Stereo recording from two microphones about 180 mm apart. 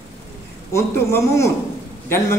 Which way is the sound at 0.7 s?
15° left (ahead or behind).